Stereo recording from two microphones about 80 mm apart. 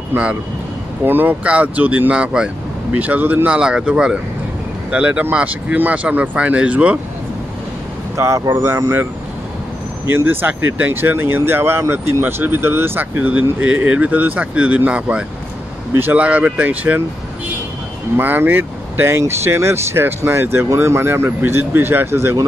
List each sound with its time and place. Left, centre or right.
0.1 s speech: centre
3.0 s speech: right
3.5 s speech: centre
8.2 s speech: right
10.0 s speech: right
15.9 s speech: right
16.2 s speech: centre
18.1 s speech: right